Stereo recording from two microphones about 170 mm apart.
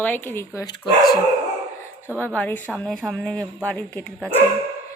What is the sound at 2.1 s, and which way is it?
A woman's voice, 10° left (ahead or behind).